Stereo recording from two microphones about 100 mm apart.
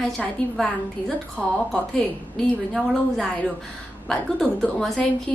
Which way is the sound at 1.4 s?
15° left (ahead or behind).